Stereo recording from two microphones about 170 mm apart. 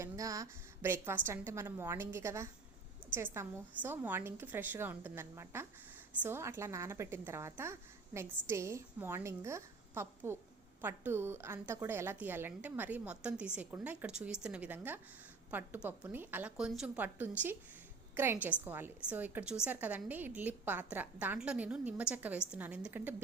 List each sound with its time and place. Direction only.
0.0 s a woman's voice: 20° right (ahead or behind)